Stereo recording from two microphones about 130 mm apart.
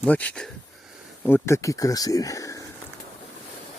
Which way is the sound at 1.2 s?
20° left (ahead or behind).